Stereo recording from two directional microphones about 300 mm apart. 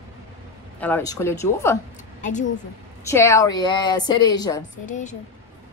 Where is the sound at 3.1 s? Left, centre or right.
Centre.